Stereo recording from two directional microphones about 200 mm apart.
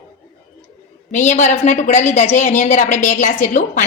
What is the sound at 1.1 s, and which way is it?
A woman's voice, 35° left (ahead or behind).